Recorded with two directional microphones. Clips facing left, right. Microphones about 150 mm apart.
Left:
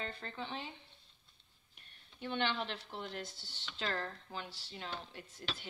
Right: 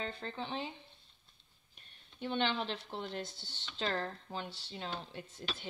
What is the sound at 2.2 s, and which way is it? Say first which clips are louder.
Speech: right 2 dB; 25° right (ahead or behind).